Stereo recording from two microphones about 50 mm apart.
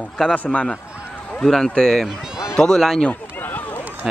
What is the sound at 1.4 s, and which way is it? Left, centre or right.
Speech, centre.